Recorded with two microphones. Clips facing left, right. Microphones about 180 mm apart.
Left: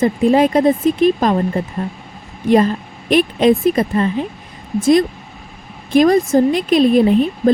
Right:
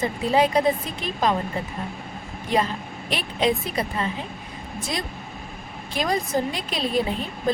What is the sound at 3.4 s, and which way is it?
Speech, 50° left (ahead or behind).